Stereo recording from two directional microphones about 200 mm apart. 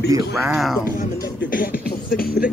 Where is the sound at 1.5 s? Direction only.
45° left (ahead or behind).